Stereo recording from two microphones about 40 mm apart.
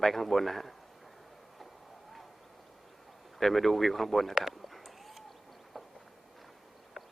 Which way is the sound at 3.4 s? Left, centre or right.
Centre.